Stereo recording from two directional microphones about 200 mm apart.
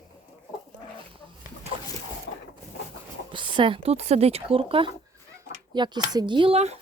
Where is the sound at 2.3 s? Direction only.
60° left (ahead or behind).